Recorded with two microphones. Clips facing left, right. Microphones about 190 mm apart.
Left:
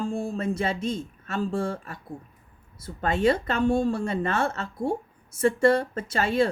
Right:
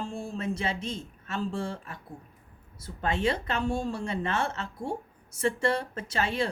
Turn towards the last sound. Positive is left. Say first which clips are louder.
# left 6 dB
turn(degrees=50)  # may be behind; listen again after turning